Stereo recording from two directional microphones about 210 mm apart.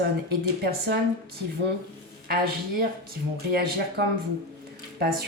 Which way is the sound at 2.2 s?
45° right (ahead or behind).